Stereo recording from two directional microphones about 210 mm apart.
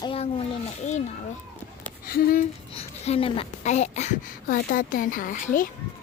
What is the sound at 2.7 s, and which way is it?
Speech, 25° left (ahead or behind).